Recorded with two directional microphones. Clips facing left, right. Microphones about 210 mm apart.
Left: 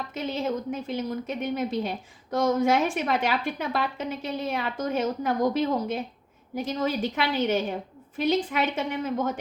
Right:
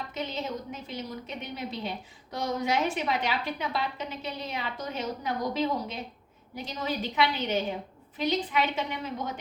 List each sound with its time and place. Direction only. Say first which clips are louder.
0.1 s a woman's voice: left 7 dB; 50° left (ahead or behind)